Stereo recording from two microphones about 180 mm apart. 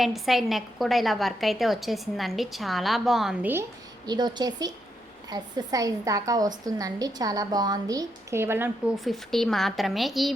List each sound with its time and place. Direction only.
0.0 s a woman's voice: centre (ahead or behind)
3.5 s a woman's voice: 20° right (ahead or behind)
9.0 s a woman's voice: centre (ahead or behind)